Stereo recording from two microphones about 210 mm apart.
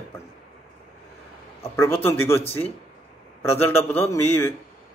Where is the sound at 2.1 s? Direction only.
10° left (ahead or behind).